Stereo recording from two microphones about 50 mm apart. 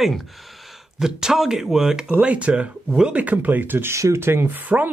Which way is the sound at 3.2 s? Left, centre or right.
Right.